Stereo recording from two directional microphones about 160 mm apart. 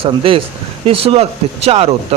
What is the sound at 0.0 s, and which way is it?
Speech, 35° right (ahead or behind).